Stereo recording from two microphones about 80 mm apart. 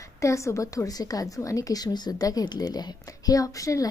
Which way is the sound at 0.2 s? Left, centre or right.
Left.